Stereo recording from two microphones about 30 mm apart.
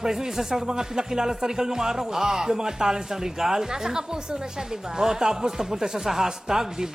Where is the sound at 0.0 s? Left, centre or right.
Centre.